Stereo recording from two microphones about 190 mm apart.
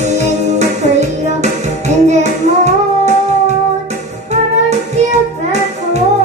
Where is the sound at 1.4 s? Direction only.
35° right (ahead or behind).